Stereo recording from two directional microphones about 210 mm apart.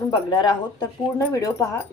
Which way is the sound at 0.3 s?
20° left (ahead or behind).